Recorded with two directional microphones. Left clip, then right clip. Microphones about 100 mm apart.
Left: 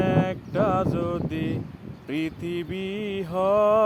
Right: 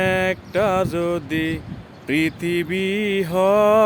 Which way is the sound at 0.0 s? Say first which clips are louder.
Right 5 dB; 35° right (ahead or behind).